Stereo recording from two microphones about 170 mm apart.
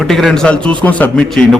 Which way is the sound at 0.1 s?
Centre (ahead or behind).